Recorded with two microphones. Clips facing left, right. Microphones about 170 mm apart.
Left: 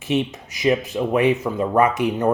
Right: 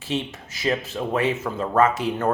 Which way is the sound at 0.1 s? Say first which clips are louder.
Left 6 dB; 15° left (ahead or behind).